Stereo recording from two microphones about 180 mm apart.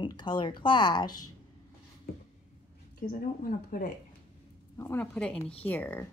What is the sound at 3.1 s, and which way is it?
Speech, 50° left (ahead or behind).